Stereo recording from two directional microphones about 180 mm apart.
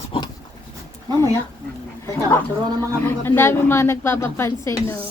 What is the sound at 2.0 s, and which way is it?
A woman's voice, 15° left (ahead or behind).